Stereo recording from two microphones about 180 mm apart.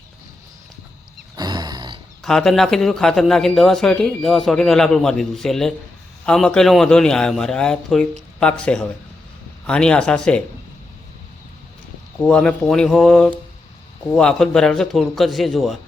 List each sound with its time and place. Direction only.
1.4 s a sound: 25° right (ahead or behind)
2.2 s a man's voice: centre (ahead or behind)
12.2 s a man's voice: 5° left (ahead or behind)